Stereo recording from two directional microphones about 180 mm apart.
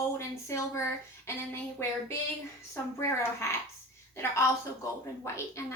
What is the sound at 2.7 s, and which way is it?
Speech, 15° left (ahead or behind).